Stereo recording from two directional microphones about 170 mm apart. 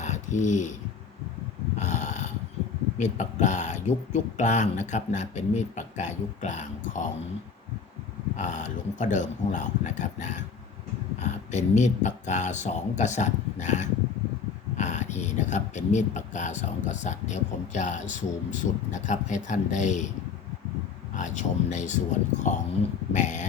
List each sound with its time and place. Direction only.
0.0 s a sound: 45° left (ahead or behind)
1.8 s snoring: 45° left (ahead or behind)
3.0 s speech: 45° left (ahead or behind)
8.4 s speech: 45° left (ahead or behind)
21.2 s speech: 45° left (ahead or behind)